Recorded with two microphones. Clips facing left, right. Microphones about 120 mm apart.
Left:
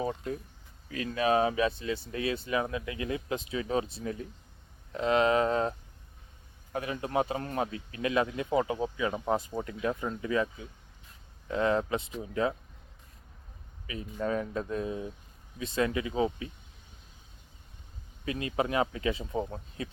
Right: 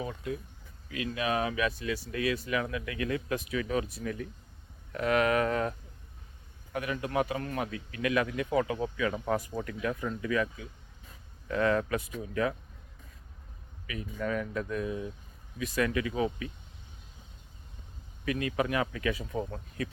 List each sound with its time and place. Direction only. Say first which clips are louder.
0.0 s a man's voice: left 3 dB; 35° left (ahead or behind)
6.7 s a man's voice: even; 30° left (ahead or behind)
13.8 s a man's voice: left 1 dB; 30° left (ahead or behind)
18.3 s a man's voice: right 1 dB; 25° left (ahead or behind)